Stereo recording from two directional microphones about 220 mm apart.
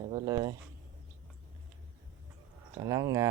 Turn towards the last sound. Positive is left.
turn(degrees=-15)  # may be behind; listen again after turning